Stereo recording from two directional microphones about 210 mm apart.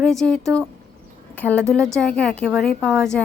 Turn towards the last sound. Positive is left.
turn(degrees=0)  # may be behind; listen again after turning